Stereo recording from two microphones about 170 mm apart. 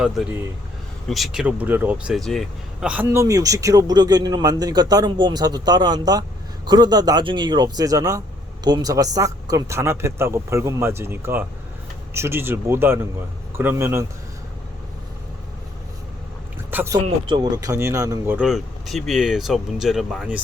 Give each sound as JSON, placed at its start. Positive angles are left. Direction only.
{"t": 1.0, "sound": "a man's voice", "side_deg": 0}
{"t": 16.7, "sound": "speech", "side_deg": -15}
{"t": 18.3, "sound": "speech", "side_deg": -5}